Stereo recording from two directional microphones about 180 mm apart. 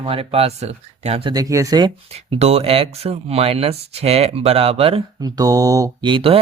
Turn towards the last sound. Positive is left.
turn(degrees=-30)  # may be behind; listen again after turning